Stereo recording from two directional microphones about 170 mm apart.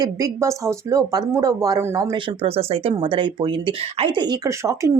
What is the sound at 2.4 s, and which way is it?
Speech, 35° right (ahead or behind).